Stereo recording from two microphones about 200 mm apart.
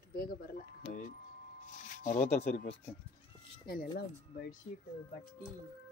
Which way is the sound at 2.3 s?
35° left (ahead or behind).